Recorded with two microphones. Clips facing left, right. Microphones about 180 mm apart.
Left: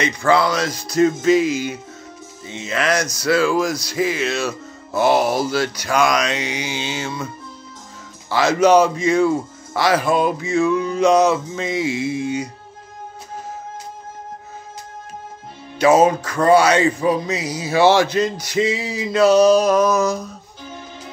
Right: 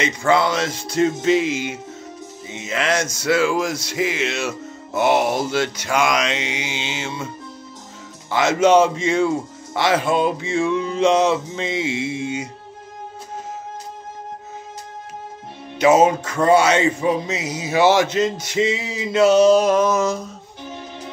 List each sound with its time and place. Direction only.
0.0 s music: 20° right (ahead or behind)
8.3 s music: 20° right (ahead or behind)
15.8 s music: 20° right (ahead or behind)